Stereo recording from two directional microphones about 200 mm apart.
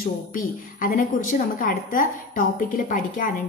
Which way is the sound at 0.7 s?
45° left (ahead or behind).